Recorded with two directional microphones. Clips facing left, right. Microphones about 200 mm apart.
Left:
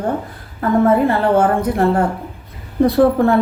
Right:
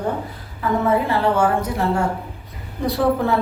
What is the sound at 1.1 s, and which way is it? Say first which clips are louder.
A woman's voice: left 4 dB; 55° left (ahead or behind).